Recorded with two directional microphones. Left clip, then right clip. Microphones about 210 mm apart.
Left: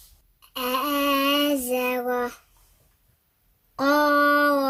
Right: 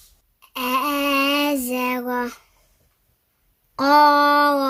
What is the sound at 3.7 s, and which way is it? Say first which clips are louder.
Child singing: right 6 dB; 35° right (ahead or behind).